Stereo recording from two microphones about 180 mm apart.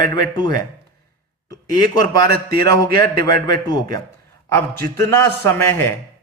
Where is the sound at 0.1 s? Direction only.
25° left (ahead or behind).